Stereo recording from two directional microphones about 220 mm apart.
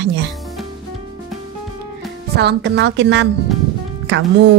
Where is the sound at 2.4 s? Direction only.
50° right (ahead or behind).